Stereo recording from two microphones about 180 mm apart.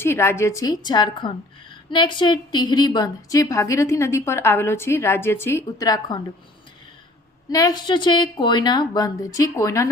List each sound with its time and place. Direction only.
0.0 s a woman's voice: 15° left (ahead or behind)
7.5 s speech: 20° left (ahead or behind)